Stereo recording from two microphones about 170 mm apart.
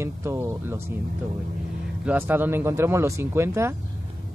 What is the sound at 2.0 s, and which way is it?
Speech, 10° right (ahead or behind).